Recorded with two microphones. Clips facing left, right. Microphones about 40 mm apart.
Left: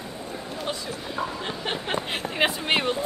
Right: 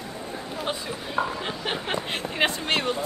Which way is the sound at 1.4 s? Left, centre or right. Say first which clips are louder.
Even; centre.